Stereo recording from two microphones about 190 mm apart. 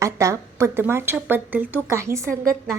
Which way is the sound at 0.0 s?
15° right (ahead or behind).